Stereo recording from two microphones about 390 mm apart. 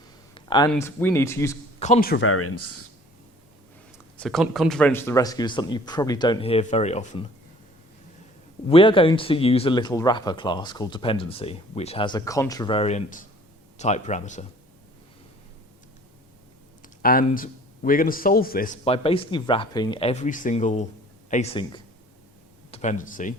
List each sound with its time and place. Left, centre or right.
0.3 s speech: centre
1.8 s speech: left
3.9 s speech: centre
8.7 s speech: centre
16.8 s speech: left